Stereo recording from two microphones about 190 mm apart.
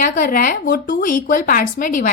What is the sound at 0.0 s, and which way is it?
A woman's voice, 45° left (ahead or behind).